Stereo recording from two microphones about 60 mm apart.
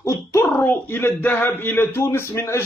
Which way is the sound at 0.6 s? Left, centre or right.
Left.